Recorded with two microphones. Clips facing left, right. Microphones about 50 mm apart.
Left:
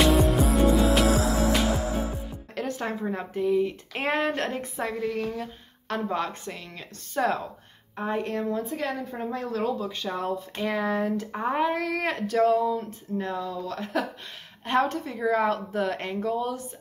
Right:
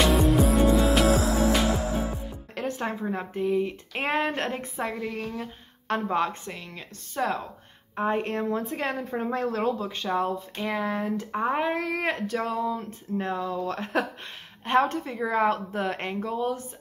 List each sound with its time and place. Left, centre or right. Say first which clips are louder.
0.0 s music: even; centre
2.5 s speech: even; centre
4.4 s speech: even; right
6.2 s speech: right 3 dB; centre
7.9 s a woman's voice: right 2 dB; right
9.8 s speech: right 4 dB; right
10.6 s speech: left 2 dB; centre
12.4 s speech: left 11 dB; centre
12.7 s speech: left 1 dB; right